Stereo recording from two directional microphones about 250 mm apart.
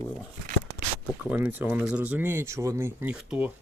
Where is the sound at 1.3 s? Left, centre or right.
Centre.